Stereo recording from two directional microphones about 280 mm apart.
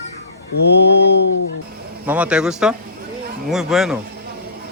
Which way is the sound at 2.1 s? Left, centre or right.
Centre.